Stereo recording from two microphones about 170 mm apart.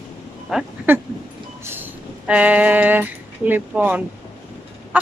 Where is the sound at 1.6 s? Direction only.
10° right (ahead or behind).